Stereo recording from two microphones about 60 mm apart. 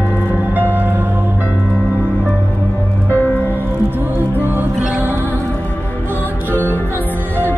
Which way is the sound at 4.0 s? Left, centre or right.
Right.